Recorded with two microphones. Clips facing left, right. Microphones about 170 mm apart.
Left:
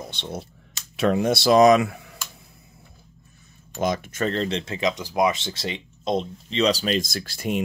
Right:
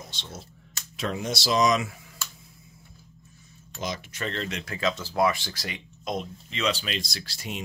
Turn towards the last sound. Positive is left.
turn(degrees=50)  # may be behind; listen again after turning